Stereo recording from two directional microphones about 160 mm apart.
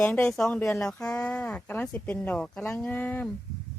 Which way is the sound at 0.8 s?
5° left (ahead or behind).